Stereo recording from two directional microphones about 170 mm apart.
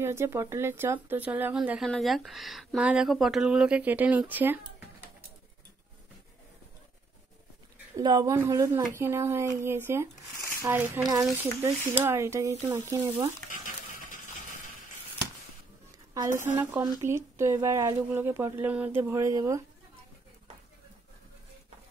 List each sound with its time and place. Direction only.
0.0 s speech: 15° right (ahead or behind)
8.0 s a woman's voice: 25° right (ahead or behind)
16.2 s speech: 15° right (ahead or behind)